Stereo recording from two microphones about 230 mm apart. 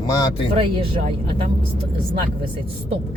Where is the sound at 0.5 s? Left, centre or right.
Right.